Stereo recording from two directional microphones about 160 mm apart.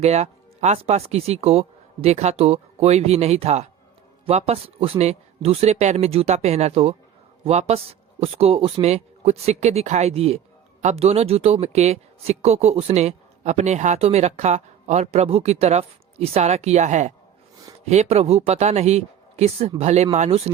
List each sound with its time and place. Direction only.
0.0 s speech: 45° right (ahead or behind)